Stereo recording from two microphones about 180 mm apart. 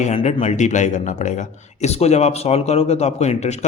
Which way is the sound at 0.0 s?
35° left (ahead or behind).